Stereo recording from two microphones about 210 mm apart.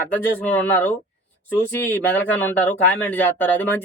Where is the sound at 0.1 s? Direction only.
10° left (ahead or behind).